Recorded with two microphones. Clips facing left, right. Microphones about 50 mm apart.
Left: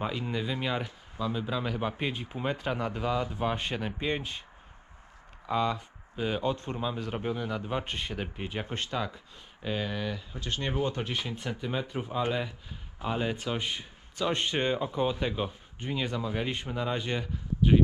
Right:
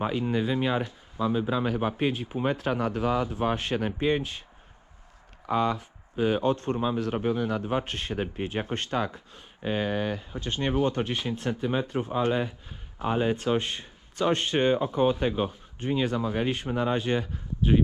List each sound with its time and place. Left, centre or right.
0.3 s speech: right
1.1 s speech: right
1.5 s speech: right
2.1 s speech: right
5.5 s speech: right
10.3 s speech: right
10.8 s speech: right
11.3 s speech: right
15.3 s speech: right
15.8 s speech: right